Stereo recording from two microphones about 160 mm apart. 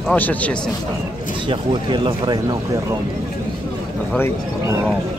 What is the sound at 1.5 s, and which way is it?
Speech, 30° right (ahead or behind).